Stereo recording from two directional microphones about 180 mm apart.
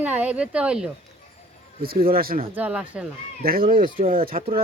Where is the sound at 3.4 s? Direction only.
55° right (ahead or behind).